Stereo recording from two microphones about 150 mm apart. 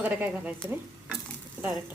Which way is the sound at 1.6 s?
15° right (ahead or behind).